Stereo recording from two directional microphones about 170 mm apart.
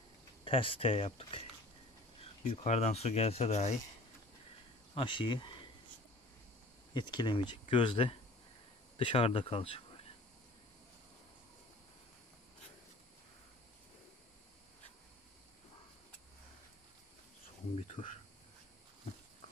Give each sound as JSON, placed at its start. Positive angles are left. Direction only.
{"t": 0.5, "sound": "speech", "side_deg": 35}
{"t": 4.9, "sound": "speech", "side_deg": 30}
{"t": 6.9, "sound": "speech", "side_deg": 25}
{"t": 17.7, "sound": "speech", "side_deg": 40}